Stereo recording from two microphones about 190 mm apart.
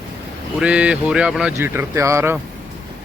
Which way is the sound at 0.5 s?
5° right (ahead or behind).